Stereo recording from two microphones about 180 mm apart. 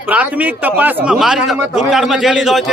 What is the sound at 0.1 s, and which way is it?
A man's voice, 10° right (ahead or behind).